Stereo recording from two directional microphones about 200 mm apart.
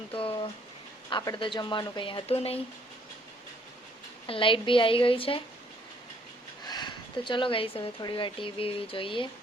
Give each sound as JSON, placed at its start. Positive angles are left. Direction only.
{"t": 0.1, "sound": "a sound", "side_deg": 25}
{"t": 1.1, "sound": "speech", "side_deg": 20}
{"t": 4.3, "sound": "speech", "side_deg": 25}
{"t": 6.7, "sound": "speech", "side_deg": 20}